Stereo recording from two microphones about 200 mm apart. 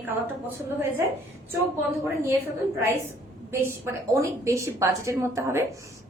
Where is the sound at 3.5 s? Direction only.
15° right (ahead or behind).